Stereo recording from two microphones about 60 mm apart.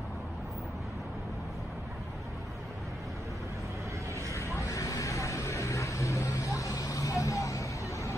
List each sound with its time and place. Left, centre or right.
4.3 s vehicle: left